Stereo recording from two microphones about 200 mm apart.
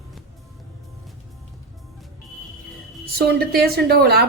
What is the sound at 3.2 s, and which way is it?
A woman's voice, 50° right (ahead or behind).